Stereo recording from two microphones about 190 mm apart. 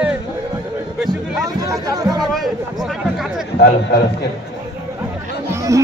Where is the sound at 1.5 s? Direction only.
20° right (ahead or behind).